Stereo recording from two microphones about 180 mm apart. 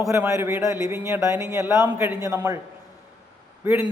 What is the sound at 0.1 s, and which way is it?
A man's voice, 15° right (ahead or behind).